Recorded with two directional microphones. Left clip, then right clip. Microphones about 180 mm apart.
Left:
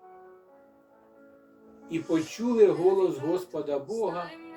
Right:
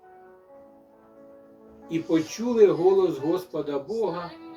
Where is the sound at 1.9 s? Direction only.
Centre (ahead or behind).